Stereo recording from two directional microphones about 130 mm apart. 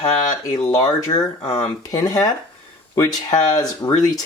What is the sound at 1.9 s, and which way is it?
Speech, 25° left (ahead or behind).